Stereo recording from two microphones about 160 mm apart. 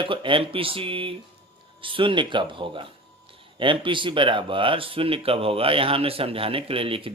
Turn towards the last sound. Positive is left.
turn(degrees=-35)  # may be behind; listen again after turning